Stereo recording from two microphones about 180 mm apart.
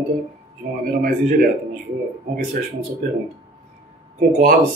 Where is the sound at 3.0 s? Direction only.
45° right (ahead or behind).